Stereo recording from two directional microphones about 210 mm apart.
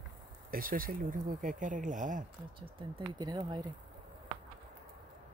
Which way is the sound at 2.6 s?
25° right (ahead or behind).